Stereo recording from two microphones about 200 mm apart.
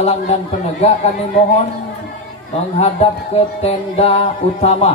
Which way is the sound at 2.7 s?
30° left (ahead or behind).